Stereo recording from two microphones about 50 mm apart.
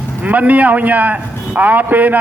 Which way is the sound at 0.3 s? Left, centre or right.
Right.